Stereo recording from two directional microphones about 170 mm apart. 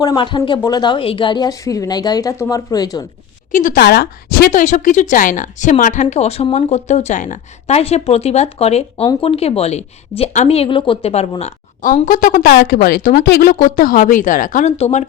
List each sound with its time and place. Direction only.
0.0 s a woman's voice: 25° left (ahead or behind)
3.5 s a woman's voice: 55° left (ahead or behind)
13.2 s a woman's voice: 70° left (ahead or behind); by 14.7 s 50° left (ahead or behind)
14.8 s a woman's voice: 40° left (ahead or behind)